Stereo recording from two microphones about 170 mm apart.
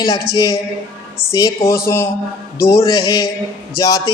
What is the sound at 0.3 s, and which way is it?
Speech, 20° left (ahead or behind).